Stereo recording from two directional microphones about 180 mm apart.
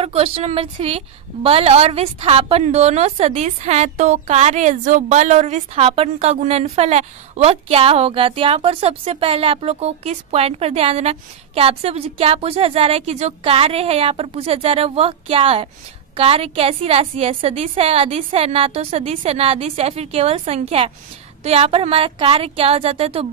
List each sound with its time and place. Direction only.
0.0 s a woman's voice: 30° right (ahead or behind)